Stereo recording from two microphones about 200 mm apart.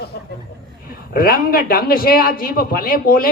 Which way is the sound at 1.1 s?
45° left (ahead or behind).